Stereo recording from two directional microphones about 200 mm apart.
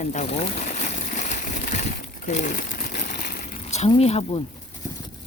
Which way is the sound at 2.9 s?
55° left (ahead or behind).